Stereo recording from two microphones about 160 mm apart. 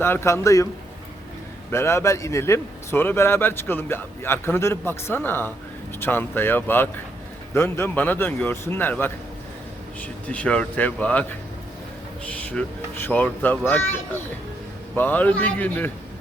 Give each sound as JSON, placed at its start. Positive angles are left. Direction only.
{"t": 0.0, "sound": "a man's voice", "side_deg": 15}
{"t": 1.7, "sound": "a man's voice", "side_deg": 15}